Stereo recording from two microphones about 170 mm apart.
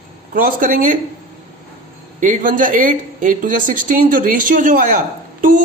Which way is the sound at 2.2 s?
50° right (ahead or behind).